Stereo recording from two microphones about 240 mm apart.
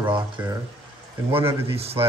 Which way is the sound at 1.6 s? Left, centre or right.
Right.